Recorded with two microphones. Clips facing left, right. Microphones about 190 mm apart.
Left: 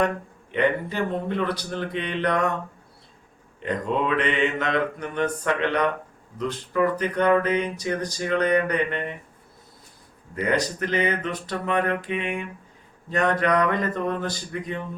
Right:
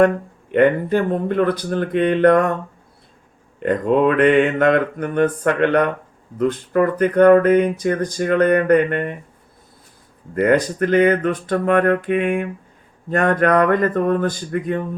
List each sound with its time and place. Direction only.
0.5 s speech: 50° right (ahead or behind)
3.6 s speech: 50° right (ahead or behind)
10.3 s speech: 55° right (ahead or behind)